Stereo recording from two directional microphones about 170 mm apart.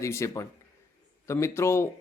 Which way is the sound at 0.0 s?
15° left (ahead or behind).